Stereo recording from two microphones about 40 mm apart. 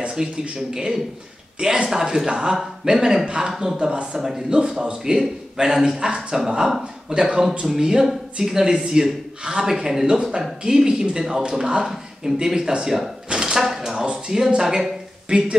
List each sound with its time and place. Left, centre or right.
0.0 s a man's voice: right
7.1 s a man's voice: right
13.3 s a sound: centre
13.6 s a man's voice: centre
14.0 s a woman's voice: centre